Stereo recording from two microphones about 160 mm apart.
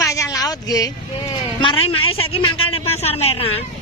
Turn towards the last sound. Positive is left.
turn(degrees=40)  # may be behind; listen again after turning